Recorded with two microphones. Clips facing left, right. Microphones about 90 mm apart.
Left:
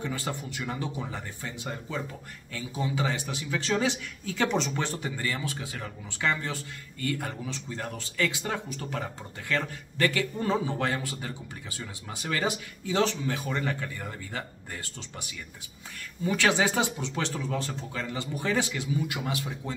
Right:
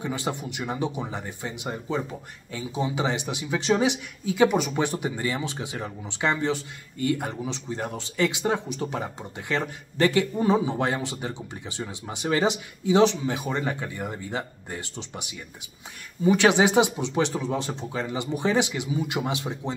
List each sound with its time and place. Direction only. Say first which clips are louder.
0.0 s speech: right 4 dB; 20° right (ahead or behind)